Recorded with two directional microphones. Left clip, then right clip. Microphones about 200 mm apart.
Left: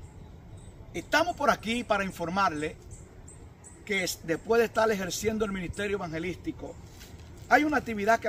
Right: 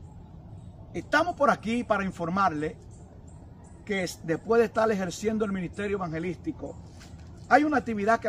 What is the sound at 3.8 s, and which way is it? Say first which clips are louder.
A man's voice: left 1 dB; 5° left (ahead or behind).